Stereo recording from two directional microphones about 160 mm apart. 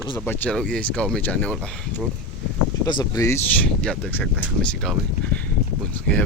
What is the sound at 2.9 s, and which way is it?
Speech, 25° left (ahead or behind).